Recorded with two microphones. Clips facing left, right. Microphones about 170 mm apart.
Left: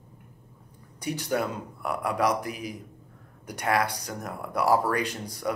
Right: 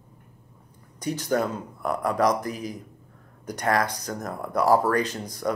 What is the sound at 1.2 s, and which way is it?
Speech, 40° right (ahead or behind).